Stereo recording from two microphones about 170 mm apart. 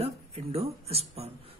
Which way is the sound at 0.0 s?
35° right (ahead or behind).